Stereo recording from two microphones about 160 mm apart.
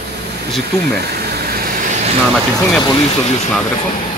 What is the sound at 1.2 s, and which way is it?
Vehicle, 75° right (ahead or behind).